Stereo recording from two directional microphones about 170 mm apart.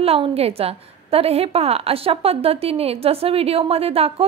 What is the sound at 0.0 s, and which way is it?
A woman's voice, 35° right (ahead or behind).